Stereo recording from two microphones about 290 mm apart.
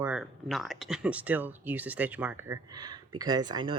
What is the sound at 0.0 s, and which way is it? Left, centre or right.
Speech, centre.